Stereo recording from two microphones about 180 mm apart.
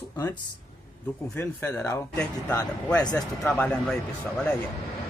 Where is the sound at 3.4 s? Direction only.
10° left (ahead or behind).